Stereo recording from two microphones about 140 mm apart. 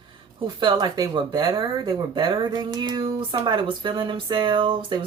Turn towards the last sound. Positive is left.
turn(degrees=-35)  # may be behind; listen again after turning